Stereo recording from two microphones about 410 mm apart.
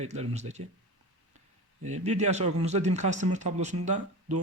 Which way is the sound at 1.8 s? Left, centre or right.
Centre.